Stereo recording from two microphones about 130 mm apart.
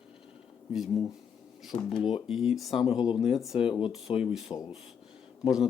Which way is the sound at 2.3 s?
5° right (ahead or behind).